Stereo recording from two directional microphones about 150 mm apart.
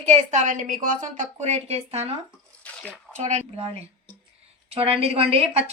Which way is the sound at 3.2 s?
50° right (ahead or behind).